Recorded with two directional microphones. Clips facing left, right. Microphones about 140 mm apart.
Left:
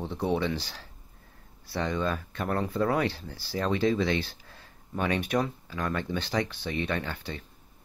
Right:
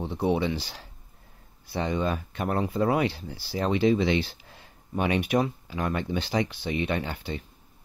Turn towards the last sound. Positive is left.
turn(degrees=-15)  # may be behind; listen again after turning